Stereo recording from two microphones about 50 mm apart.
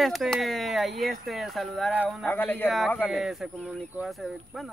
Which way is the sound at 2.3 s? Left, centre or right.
Left.